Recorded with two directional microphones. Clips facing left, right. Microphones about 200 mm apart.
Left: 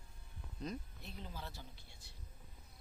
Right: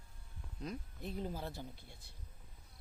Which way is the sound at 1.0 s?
50° right (ahead or behind).